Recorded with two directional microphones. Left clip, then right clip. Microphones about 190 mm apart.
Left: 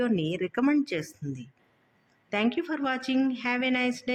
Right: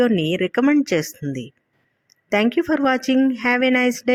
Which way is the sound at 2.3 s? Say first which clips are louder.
Right 10 dB; 20° right (ahead or behind).